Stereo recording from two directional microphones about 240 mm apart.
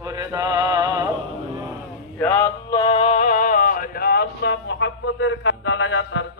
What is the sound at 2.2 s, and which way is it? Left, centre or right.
Male singing, centre.